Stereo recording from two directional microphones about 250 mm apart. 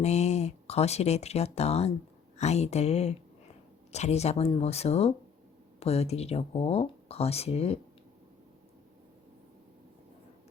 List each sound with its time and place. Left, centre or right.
0.0 s speech: left